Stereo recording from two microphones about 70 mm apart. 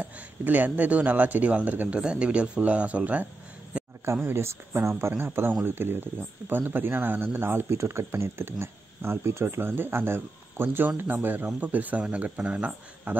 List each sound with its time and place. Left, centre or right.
0.0 s speech: right
2.0 s speech: centre
3.7 s a sound: centre
4.3 s speech: right